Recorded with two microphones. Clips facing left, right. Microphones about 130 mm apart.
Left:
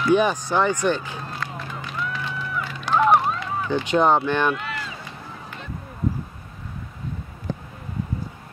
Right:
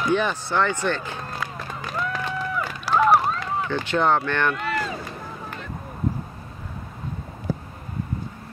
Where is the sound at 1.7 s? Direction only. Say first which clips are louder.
Right 4 dB; 45° right (ahead or behind).